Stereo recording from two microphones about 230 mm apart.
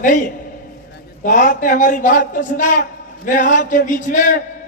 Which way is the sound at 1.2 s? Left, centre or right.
Left.